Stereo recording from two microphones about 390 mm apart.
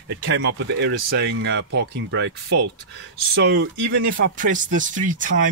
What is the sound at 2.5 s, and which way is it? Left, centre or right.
Speech, right.